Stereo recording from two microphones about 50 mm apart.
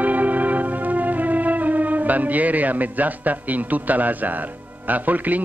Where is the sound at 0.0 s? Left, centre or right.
Right.